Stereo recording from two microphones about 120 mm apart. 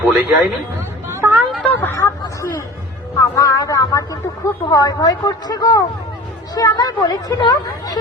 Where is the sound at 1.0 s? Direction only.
20° right (ahead or behind).